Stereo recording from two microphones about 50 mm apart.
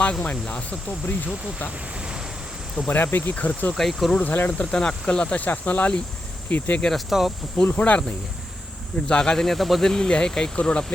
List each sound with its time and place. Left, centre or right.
0.0 s speech: centre
0.3 s cricket: centre
0.9 s speech: left
2.0 s waves: centre
2.9 s speech: left
3.3 s speech: left
3.8 s speech: centre
4.2 s speech: left
4.5 s speech: centre
5.4 s speech: left
6.5 s cricket: left
7.1 s speech: centre
7.5 s cricket: left
9.0 s speech: centre